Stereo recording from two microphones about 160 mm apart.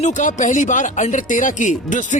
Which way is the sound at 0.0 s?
50° left (ahead or behind).